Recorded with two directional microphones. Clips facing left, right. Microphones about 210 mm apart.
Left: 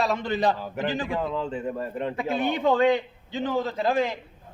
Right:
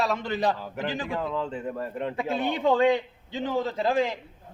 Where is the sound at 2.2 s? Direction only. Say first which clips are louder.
Left 1 dB; 30° right (ahead or behind).